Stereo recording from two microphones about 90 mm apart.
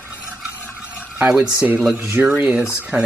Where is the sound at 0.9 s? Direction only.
10° right (ahead or behind).